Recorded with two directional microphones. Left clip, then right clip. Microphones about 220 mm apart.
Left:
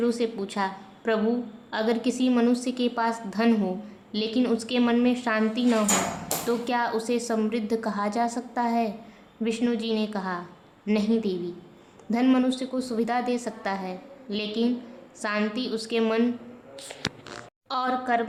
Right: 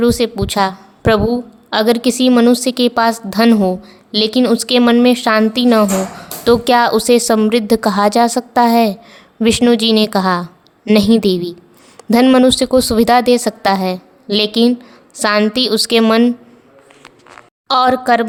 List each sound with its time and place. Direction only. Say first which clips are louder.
0.0 s a woman's voice: right 12 dB; 45° right (ahead or behind)
17.7 s a woman's voice: right 14 dB; 45° right (ahead or behind)